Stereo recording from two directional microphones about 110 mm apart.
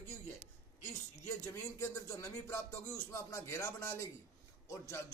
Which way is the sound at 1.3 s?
25° left (ahead or behind).